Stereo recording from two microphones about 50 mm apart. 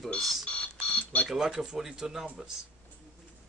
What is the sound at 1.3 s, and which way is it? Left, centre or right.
Speech, centre.